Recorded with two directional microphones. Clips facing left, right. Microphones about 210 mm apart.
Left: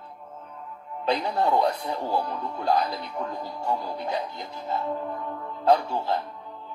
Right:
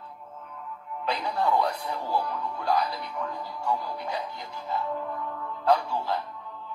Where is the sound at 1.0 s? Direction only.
25° left (ahead or behind).